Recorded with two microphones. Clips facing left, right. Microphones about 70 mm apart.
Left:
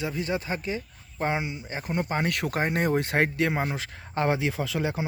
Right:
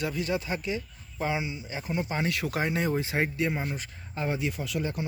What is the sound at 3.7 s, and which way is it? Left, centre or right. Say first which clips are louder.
Speech: left 6 dB; left.